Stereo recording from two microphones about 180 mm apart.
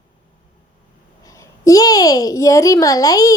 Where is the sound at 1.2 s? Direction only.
20° left (ahead or behind).